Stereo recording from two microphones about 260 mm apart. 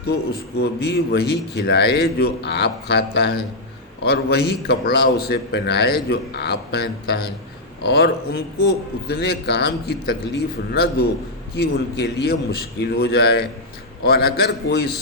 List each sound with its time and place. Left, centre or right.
0.6 s a man's voice: left